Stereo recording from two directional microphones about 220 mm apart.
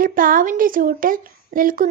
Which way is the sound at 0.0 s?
40° right (ahead or behind).